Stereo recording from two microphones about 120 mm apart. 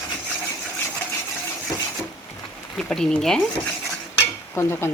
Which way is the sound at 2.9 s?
5° left (ahead or behind).